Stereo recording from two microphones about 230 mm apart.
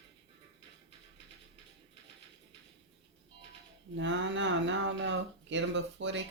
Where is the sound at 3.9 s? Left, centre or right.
Right.